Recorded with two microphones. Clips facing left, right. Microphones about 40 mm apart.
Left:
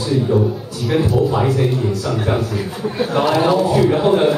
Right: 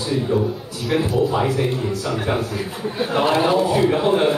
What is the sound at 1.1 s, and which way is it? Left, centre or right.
Speech, centre.